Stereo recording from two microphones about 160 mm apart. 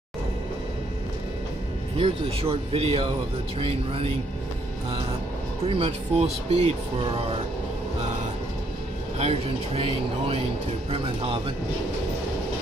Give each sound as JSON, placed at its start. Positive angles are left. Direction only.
{"t": 2.0, "sound": "speech", "side_deg": -40}
{"t": 5.7, "sound": "speech", "side_deg": -40}
{"t": 9.2, "sound": "speech", "side_deg": -40}